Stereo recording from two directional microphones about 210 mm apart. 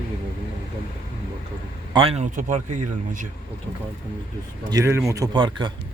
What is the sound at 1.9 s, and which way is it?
Speech, 25° right (ahead or behind).